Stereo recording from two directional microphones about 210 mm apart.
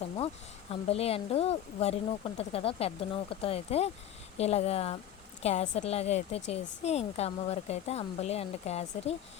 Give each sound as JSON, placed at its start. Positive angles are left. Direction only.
{"t": 0.7, "sound": "a woman's voice", "side_deg": 30}